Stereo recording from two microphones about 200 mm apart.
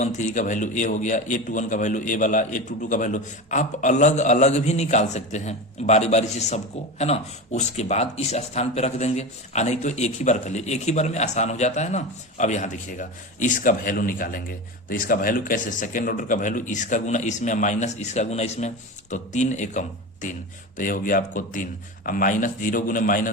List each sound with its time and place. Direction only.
0.0 s speech: 35° left (ahead or behind)